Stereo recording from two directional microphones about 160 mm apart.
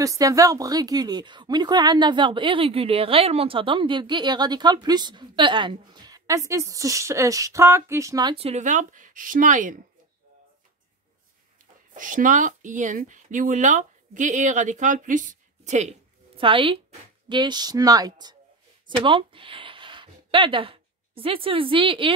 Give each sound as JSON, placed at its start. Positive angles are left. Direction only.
{"t": 0.0, "sound": "speech", "side_deg": -20}
{"t": 8.5, "sound": "speech", "side_deg": -50}
{"t": 11.9, "sound": "speech", "side_deg": -55}
{"t": 16.3, "sound": "speech", "side_deg": -35}